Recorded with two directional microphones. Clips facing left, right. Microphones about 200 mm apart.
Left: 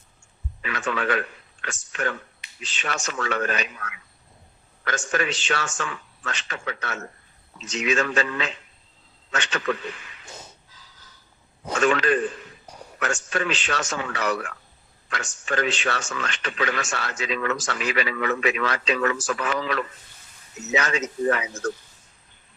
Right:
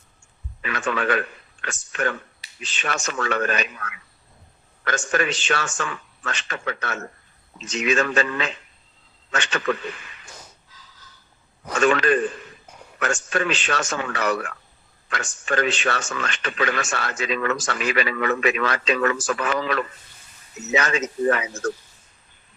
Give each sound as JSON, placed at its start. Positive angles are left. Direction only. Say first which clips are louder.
{"t": 0.6, "sound": "radio", "louder": "right 2 dB", "side_deg": -55}
{"t": 1.6, "sound": "a man's voice", "louder": "right 3 dB", "side_deg": -55}
{"t": 11.8, "sound": "a man's voice", "louder": "right 2 dB", "side_deg": -55}